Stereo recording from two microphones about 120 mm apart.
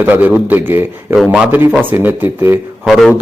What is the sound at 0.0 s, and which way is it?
Speech, 15° right (ahead or behind).